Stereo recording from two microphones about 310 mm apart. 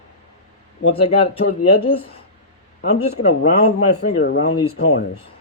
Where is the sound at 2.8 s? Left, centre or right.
Left.